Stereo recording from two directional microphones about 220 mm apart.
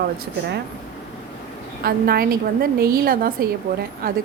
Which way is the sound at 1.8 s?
45° right (ahead or behind).